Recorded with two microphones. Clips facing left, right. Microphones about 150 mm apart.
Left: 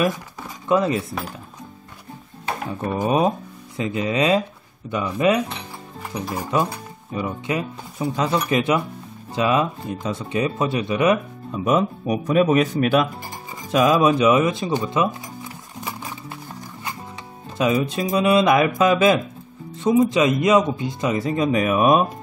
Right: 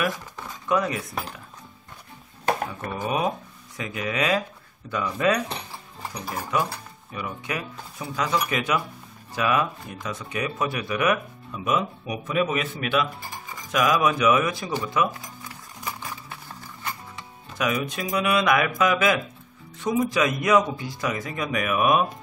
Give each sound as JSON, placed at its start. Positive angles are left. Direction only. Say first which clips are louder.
{"t": 0.7, "sound": "speech", "louder": "left 5 dB", "side_deg": 25}
{"t": 3.1, "sound": "speech", "louder": "left 5 dB", "side_deg": 30}
{"t": 11.6, "sound": "a man's voice", "louder": "left 6 dB", "side_deg": 40}
{"t": 13.5, "sound": "music", "louder": "left 5 dB", "side_deg": 30}
{"t": 17.6, "sound": "speech", "louder": "left 6 dB", "side_deg": 30}